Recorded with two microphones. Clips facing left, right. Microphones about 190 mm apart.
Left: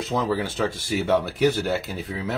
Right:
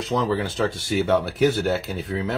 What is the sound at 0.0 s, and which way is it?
Speech, centre (ahead or behind).